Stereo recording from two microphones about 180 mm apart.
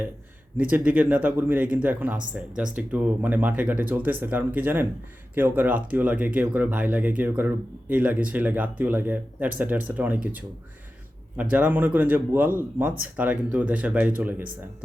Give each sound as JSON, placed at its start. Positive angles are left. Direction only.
{"t": 0.5, "sound": "speech", "side_deg": -5}
{"t": 11.5, "sound": "speech", "side_deg": -10}